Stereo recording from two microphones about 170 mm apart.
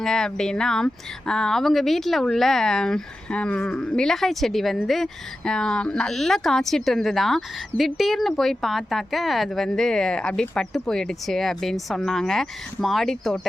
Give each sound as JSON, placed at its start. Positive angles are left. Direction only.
{"t": 0.0, "sound": "speech", "side_deg": 5}